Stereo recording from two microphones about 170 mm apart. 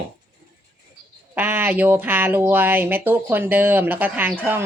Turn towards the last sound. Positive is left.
turn(degrees=-10)  # may be behind; listen again after turning